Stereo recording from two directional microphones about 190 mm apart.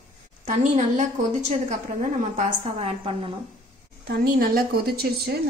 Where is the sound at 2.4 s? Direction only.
35° right (ahead or behind).